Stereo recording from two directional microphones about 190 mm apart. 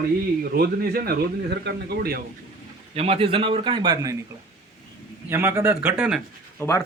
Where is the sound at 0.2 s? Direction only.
50° right (ahead or behind).